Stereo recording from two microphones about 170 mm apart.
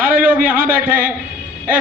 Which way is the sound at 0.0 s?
55° right (ahead or behind).